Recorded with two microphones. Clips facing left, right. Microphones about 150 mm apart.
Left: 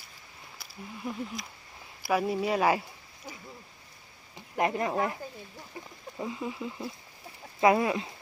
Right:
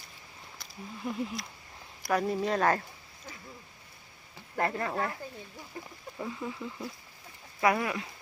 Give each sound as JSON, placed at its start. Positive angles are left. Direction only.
{"t": 0.6, "sound": "speech", "side_deg": 0}
{"t": 4.4, "sound": "speech", "side_deg": 15}